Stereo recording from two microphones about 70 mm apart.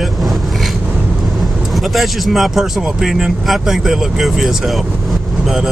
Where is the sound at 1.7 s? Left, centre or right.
Centre.